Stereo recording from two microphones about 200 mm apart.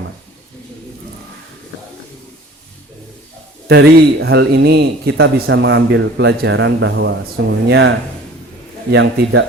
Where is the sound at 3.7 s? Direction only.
55° right (ahead or behind).